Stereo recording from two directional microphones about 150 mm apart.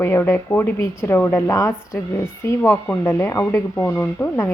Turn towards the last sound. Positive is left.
turn(degrees=15)  # may be behind; listen again after turning